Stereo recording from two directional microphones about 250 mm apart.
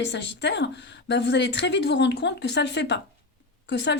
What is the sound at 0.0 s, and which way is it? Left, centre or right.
Speech, left.